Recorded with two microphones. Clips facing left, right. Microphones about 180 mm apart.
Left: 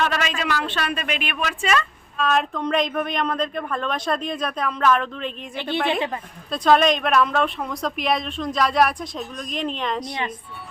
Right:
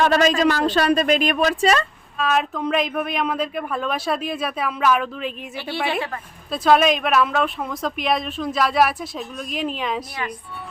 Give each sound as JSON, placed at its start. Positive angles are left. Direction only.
{"t": 0.0, "sound": "speech", "side_deg": -40}
{"t": 2.1, "sound": "speech", "side_deg": -5}
{"t": 5.9, "sound": "a woman's voice", "side_deg": 20}
{"t": 6.5, "sound": "speech", "side_deg": -5}